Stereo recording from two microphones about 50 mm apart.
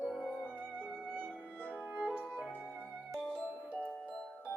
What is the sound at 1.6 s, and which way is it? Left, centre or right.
Music, left.